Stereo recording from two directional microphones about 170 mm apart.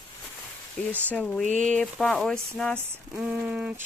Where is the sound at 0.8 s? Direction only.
10° left (ahead or behind).